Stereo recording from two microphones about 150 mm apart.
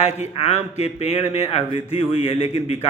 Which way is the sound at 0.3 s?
40° left (ahead or behind).